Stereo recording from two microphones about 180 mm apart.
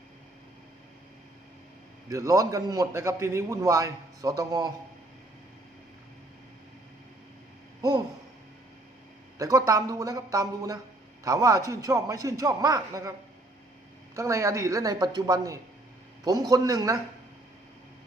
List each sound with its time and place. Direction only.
2.0 s a man's voice: 15° right (ahead or behind)
7.8 s speech: 20° right (ahead or behind)
9.4 s a man's voice: 20° right (ahead or behind)
14.2 s a man's voice: 15° right (ahead or behind)